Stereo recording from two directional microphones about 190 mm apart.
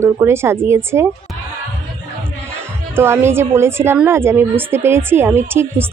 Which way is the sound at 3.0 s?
10° right (ahead or behind).